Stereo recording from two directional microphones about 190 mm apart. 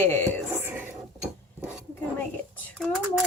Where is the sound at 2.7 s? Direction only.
Centre (ahead or behind).